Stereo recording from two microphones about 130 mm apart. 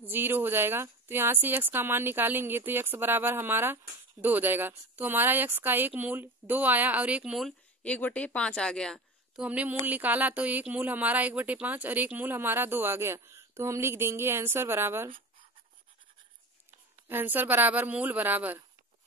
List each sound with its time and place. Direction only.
0.0 s speech: 15° right (ahead or behind)
7.8 s speech: 10° left (ahead or behind)
9.4 s speech: 10° right (ahead or behind)
17.1 s speech: 15° right (ahead or behind)